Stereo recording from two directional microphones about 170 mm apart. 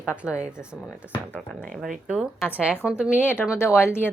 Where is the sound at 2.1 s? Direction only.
5° right (ahead or behind).